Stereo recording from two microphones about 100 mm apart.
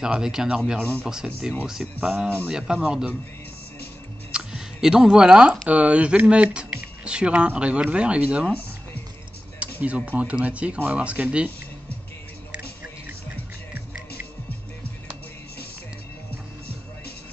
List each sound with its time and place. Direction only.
0.0 s speech: 5° right (ahead or behind)
2.2 s speech: 20° right (ahead or behind)
2.5 s speech: 10° right (ahead or behind)
4.3 s a sound: 10° right (ahead or behind)
5.7 s speech: 10° right (ahead or behind)
9.6 s speech: 15° right (ahead or behind)